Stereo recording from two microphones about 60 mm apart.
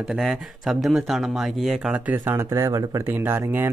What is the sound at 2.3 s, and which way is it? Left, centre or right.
Speech, right.